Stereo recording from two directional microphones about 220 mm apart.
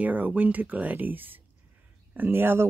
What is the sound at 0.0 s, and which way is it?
Speech, 5° right (ahead or behind).